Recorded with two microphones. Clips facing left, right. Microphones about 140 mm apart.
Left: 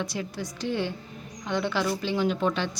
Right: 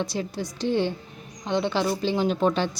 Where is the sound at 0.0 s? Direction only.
30° right (ahead or behind).